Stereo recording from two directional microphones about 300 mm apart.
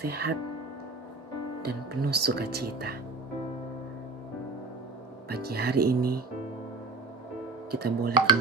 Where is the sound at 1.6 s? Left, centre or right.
Right.